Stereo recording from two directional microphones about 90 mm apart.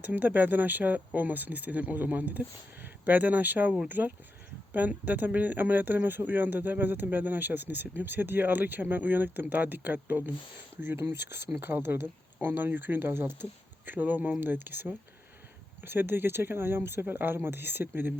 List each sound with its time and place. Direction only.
0.0 s speech: 20° right (ahead or behind)